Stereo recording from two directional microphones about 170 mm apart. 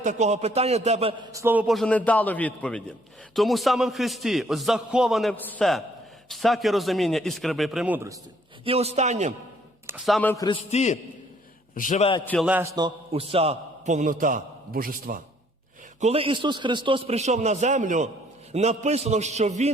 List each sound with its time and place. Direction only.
0.0 s a man's voice: 45° right (ahead or behind)
1.3 s a man's voice: 15° right (ahead or behind)
1.6 s a man's voice: centre (ahead or behind); by 8.2 s 15° right (ahead or behind)
8.6 s a man's voice: 35° right (ahead or behind)
10.1 s a man's voice: 10° left (ahead or behind)
10.3 s a man's voice: 20° left (ahead or behind)
10.7 s a man's voice: 40° left (ahead or behind)
12.4 s a man's voice: 10° right (ahead or behind)
12.7 s a man's voice: 30° right (ahead or behind); by 15.2 s 55° right (ahead or behind)
16.0 s a man's voice: 35° right (ahead or behind)